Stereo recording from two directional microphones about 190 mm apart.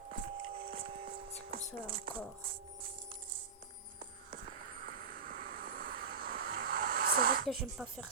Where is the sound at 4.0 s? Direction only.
45° right (ahead or behind).